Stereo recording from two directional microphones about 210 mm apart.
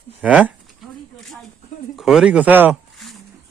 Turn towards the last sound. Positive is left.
turn(degrees=0)  # may be behind; listen again after turning